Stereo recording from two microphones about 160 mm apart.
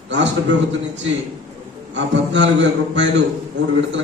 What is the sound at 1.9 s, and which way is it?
A man's voice, 90° right.